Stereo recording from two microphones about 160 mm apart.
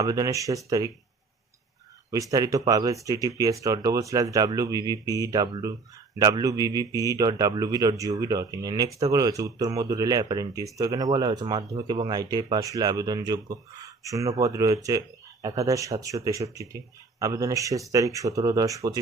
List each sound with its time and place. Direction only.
0.0 s a man's voice: 20° right (ahead or behind)
2.0 s a man's voice: 20° right (ahead or behind)